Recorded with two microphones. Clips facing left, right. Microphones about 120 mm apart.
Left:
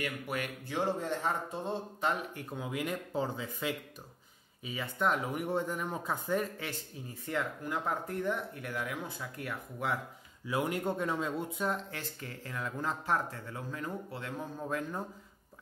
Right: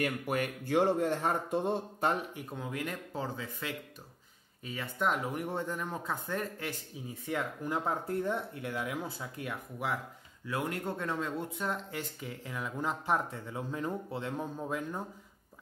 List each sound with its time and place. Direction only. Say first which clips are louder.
0.0 s speech: right 4 dB; 45° right (ahead or behind)
2.5 s speech: left 2 dB; 10° left (ahead or behind)
4.6 s speech: left 1 dB; centre (ahead or behind)
7.2 s speech: even; 15° right (ahead or behind)
8.1 s speech: right 1 dB; 30° right (ahead or behind)
10.4 s speech: left 2 dB; 15° left (ahead or behind)
12.2 s speech: right 1 dB; 10° right (ahead or behind)
14.6 s speech: even; 5° right (ahead or behind)